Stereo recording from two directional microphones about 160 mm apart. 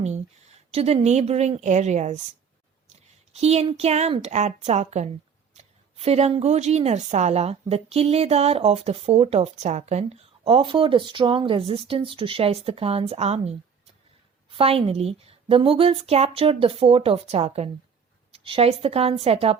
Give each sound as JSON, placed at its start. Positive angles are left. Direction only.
{"t": 0.7, "sound": "a woman's voice", "side_deg": -40}
{"t": 3.4, "sound": "a woman's voice", "side_deg": -40}
{"t": 14.5, "sound": "a woman's voice", "side_deg": -35}